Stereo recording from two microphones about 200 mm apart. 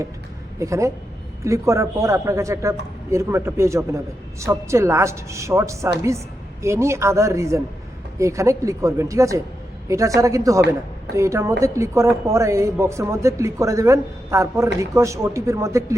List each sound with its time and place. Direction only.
0.6 s speech: 15° right (ahead or behind)